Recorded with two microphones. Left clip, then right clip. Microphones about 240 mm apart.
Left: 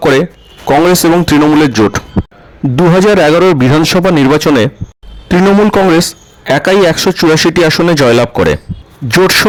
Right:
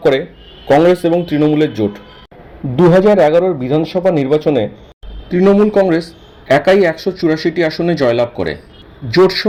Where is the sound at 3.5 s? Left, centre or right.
Left.